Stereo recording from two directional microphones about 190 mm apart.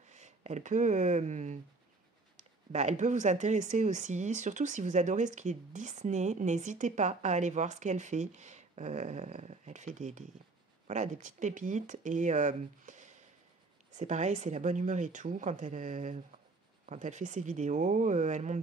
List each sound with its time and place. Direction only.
0.1 s speech: 35° right (ahead or behind)
2.7 s speech: 35° right (ahead or behind)